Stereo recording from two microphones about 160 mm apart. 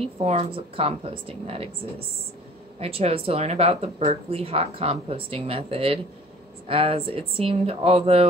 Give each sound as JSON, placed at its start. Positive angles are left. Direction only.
{"t": 0.0, "sound": "speech", "side_deg": -40}